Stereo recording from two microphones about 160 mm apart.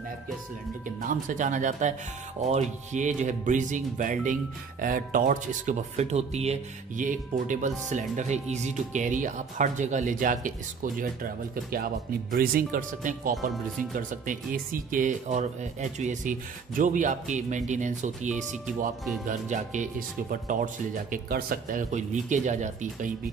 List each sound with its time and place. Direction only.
1.0 s speech: 55° right (ahead or behind)
11.5 s speech: 70° right (ahead or behind); by 22.8 s 50° right (ahead or behind)